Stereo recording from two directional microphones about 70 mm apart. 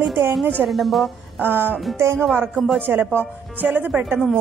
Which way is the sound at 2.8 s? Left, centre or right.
Right.